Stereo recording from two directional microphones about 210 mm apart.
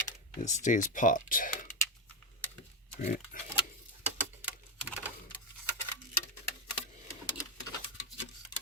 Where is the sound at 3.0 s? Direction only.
35° left (ahead or behind).